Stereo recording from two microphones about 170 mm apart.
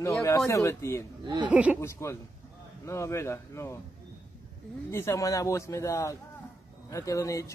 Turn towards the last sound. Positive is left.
turn(degrees=20)  # may be behind; listen again after turning